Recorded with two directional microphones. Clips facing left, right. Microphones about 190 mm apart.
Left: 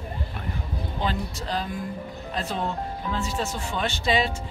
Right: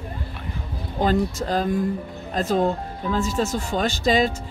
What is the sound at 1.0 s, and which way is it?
Speech, 45° right (ahead or behind).